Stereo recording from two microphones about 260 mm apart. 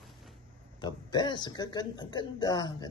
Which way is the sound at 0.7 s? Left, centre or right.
Centre.